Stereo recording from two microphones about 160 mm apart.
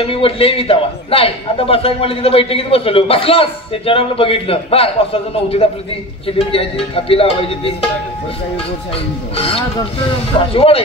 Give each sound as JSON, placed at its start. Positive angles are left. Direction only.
{"t": 0.0, "sound": "a man's voice", "side_deg": 35}
{"t": 9.4, "sound": "a man's voice", "side_deg": 35}